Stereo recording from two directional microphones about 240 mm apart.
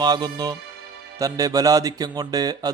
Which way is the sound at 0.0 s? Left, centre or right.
Centre.